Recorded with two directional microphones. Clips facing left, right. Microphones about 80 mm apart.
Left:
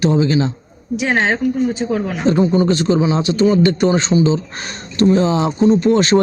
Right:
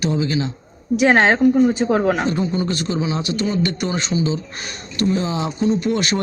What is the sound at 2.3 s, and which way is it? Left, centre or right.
A man's voice, left.